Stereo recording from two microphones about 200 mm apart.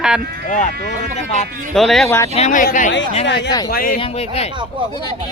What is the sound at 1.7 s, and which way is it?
Speech, centre (ahead or behind).